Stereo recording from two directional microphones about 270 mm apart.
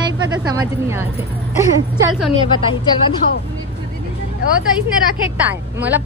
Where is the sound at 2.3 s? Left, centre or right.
Centre.